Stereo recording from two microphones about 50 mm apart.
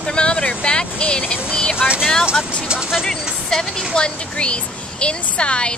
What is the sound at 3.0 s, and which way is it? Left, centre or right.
Speech, centre.